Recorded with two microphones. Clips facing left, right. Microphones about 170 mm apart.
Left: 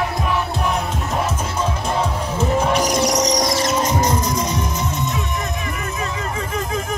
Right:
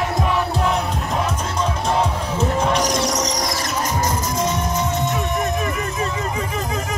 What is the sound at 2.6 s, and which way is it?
Basketball bounce, 10° left (ahead or behind).